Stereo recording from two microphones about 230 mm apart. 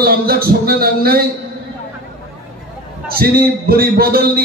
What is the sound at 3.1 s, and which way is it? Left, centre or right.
A man's voice, right.